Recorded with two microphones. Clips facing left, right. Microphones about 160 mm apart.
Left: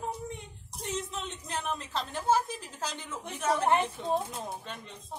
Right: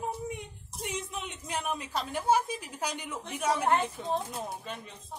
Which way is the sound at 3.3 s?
10° right (ahead or behind).